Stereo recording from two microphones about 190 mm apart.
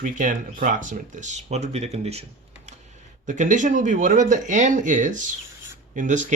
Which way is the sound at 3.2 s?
40° right (ahead or behind).